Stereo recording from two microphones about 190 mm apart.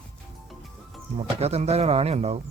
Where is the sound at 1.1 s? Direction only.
35° right (ahead or behind).